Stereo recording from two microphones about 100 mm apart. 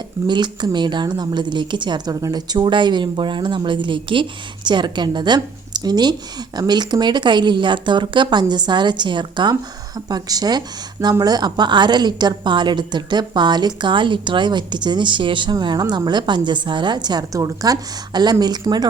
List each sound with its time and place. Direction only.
0.3 s a woman's voice: 50° right (ahead or behind)